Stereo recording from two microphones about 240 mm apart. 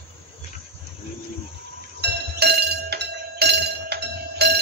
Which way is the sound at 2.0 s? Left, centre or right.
Right.